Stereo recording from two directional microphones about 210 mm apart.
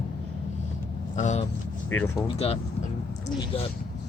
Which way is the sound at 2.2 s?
30° left (ahead or behind).